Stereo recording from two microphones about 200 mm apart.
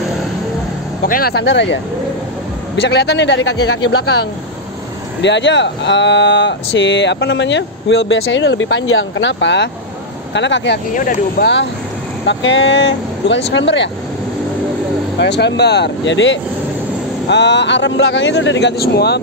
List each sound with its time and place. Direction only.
1.0 s speech: 45° left (ahead or behind); by 3.8 s 80° left
5.2 s speech: 60° left (ahead or behind)
11.0 s speech: 45° left (ahead or behind)
12.3 s speech: 65° left (ahead or behind)
15.1 s speech: 60° left (ahead or behind)